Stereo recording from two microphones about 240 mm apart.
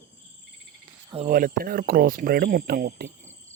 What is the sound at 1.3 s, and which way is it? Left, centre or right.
Speech, right.